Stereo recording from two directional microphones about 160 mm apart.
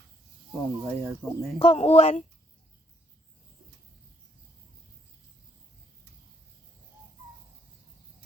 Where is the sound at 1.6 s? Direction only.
35° left (ahead or behind).